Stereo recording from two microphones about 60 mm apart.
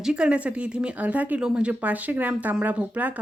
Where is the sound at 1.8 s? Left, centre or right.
Right.